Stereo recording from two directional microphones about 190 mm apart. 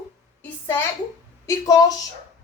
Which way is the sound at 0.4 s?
10° left (ahead or behind).